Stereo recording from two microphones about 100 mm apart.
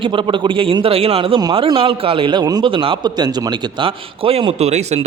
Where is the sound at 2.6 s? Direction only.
60° right (ahead or behind).